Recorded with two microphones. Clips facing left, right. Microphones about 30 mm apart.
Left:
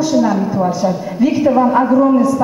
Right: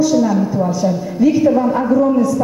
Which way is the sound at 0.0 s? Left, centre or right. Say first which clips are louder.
Even; left.